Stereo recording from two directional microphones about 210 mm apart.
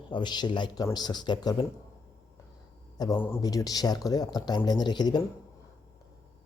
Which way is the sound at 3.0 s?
15° left (ahead or behind).